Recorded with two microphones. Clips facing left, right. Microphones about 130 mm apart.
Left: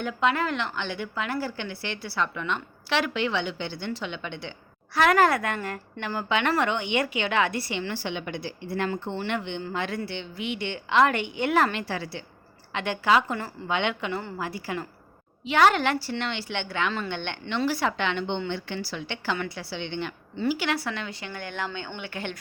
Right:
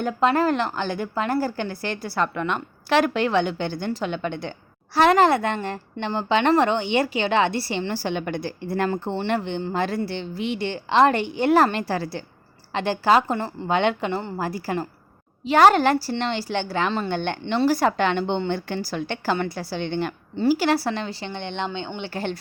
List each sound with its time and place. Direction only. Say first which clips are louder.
0.0 s a woman's voice: right 5 dB; 40° right (ahead or behind)
4.9 s a woman's voice: right 4 dB; 25° right (ahead or behind)
14.3 s a woman's voice: right 5 dB; 40° right (ahead or behind)